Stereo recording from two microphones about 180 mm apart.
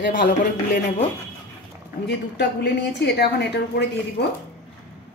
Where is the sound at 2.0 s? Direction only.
70° left (ahead or behind).